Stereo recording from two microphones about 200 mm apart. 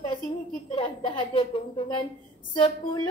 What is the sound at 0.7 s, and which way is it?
A woman's voice, 25° left (ahead or behind).